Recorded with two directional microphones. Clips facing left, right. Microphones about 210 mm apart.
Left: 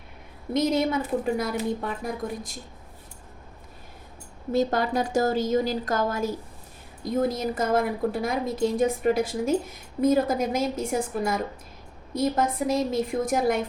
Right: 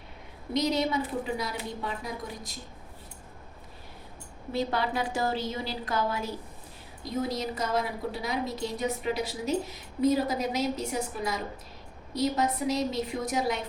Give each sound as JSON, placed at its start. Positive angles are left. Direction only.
{"t": 0.5, "sound": "a woman's voice", "side_deg": 50}
{"t": 4.5, "sound": "a woman's voice", "side_deg": 45}